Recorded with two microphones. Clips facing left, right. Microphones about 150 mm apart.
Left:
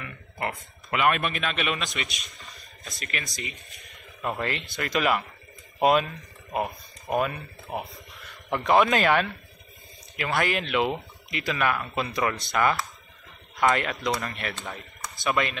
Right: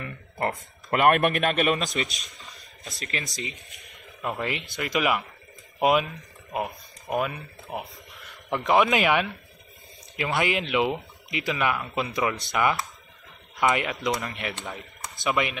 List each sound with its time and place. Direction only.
0.0 s a sound: 40° right (ahead or behind)
0.9 s a man's voice: 50° right (ahead or behind)
2.8 s speech: 30° right (ahead or behind)
4.2 s speech: 10° right (ahead or behind)